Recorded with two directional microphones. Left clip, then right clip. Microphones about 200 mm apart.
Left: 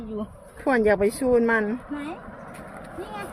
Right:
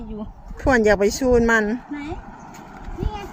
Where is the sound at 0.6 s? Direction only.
30° right (ahead or behind).